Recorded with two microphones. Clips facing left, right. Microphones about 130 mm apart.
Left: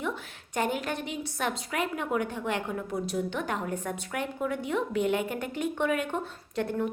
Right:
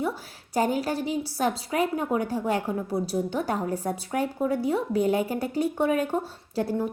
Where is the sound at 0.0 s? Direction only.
35° right (ahead or behind).